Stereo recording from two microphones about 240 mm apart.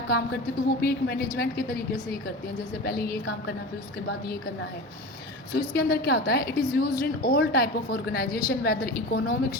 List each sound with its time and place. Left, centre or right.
0.1 s a woman's voice: left
5.5 s a woman's voice: left